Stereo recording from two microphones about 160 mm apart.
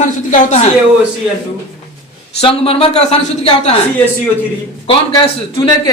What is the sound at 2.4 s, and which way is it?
A woman's voice, 35° left (ahead or behind).